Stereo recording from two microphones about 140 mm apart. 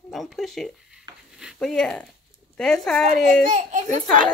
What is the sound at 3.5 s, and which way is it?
Speech, 65° right (ahead or behind).